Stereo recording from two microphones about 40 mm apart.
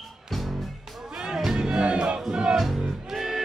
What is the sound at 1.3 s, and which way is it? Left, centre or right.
Music, centre.